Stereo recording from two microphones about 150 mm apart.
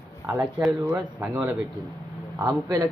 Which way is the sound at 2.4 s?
30° right (ahead or behind).